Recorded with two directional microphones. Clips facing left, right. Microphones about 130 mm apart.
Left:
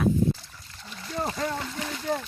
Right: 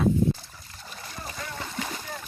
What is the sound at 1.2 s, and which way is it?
Splash, 50° left (ahead or behind).